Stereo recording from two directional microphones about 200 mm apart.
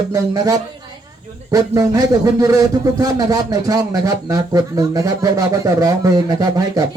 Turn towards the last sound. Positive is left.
turn(degrees=-15)  # may be behind; listen again after turning